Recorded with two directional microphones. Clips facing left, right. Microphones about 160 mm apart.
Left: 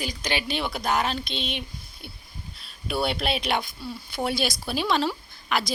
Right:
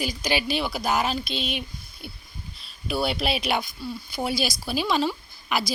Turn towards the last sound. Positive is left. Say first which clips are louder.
# even
turn(degrees=-5)  # may be behind; listen again after turning